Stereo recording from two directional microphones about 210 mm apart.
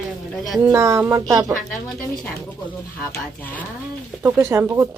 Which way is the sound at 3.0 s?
10° left (ahead or behind).